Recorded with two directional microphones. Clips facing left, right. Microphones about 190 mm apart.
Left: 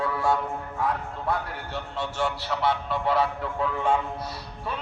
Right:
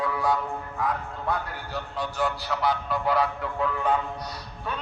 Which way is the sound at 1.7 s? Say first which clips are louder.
Even; 25° left (ahead or behind).